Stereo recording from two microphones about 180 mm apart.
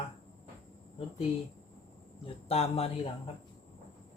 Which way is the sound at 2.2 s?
35° left (ahead or behind).